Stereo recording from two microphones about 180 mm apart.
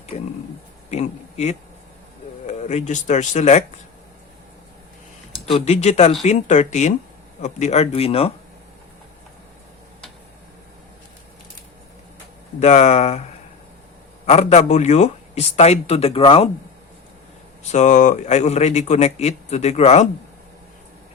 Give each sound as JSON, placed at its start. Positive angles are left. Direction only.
{"t": 0.9, "sound": "a man's voice", "side_deg": 40}
{"t": 5.3, "sound": "a man's voice", "side_deg": 35}
{"t": 12.5, "sound": "a man's voice", "side_deg": 40}
{"t": 14.3, "sound": "a man's voice", "side_deg": 35}
{"t": 17.6, "sound": "a man's voice", "side_deg": 40}